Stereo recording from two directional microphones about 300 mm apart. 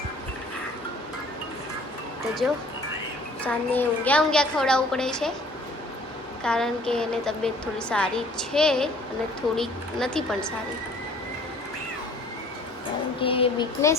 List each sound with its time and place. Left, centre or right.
3.4 s a woman's voice: centre
6.4 s a woman's voice: centre
13.2 s speech: centre